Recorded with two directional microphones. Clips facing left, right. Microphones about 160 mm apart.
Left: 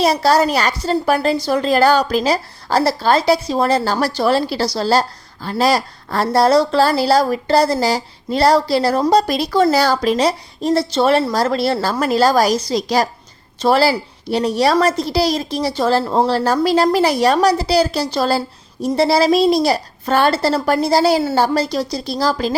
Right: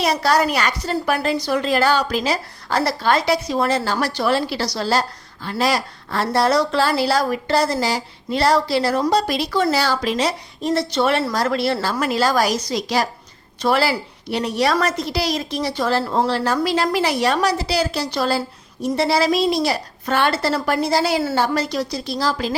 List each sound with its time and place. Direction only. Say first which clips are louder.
0.0 s a woman's voice: left 4 dB; 30° left (ahead or behind)